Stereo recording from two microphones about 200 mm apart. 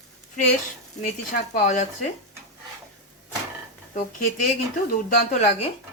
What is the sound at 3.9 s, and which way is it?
Speech, 40° left (ahead or behind).